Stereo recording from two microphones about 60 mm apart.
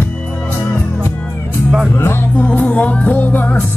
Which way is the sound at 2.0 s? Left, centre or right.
Left.